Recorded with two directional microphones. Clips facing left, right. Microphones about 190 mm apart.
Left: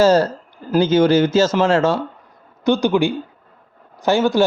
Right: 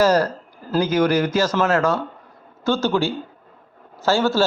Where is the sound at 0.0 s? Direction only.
25° left (ahead or behind).